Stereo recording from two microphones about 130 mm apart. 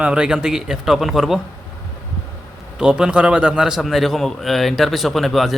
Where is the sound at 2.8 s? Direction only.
5° right (ahead or behind).